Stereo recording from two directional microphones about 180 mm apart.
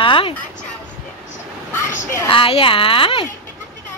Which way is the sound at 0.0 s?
30° left (ahead or behind).